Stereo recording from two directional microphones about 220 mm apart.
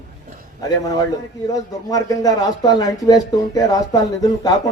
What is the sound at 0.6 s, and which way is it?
Speech, 15° left (ahead or behind).